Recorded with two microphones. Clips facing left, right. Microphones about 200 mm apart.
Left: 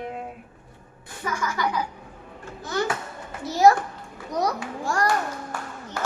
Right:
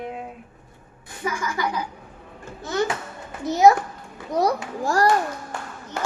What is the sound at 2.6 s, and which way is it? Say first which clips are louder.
A child's voice: right 2 dB; 25° right (ahead or behind).